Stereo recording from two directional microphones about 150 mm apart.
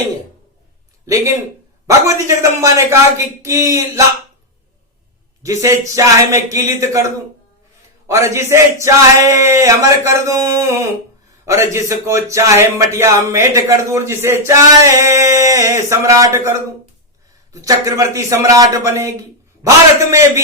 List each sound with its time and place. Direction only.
1.0 s speech: 20° right (ahead or behind)
5.4 s speech: 20° right (ahead or behind)
17.5 s speech: 20° right (ahead or behind)